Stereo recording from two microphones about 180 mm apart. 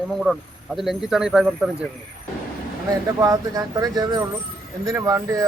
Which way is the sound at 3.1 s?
20° right (ahead or behind).